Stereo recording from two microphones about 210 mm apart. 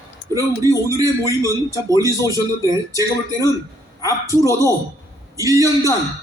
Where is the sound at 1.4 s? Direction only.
15° left (ahead or behind).